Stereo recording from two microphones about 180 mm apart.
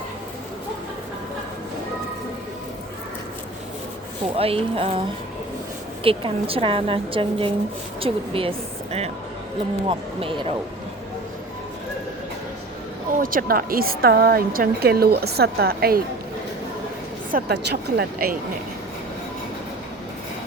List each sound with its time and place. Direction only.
4.4 s a woman's voice: 30° right (ahead or behind)
13.1 s speech: 50° right (ahead or behind)
17.3 s speech: 65° right (ahead or behind)